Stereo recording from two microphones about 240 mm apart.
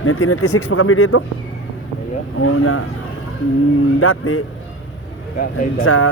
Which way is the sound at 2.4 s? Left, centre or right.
Left.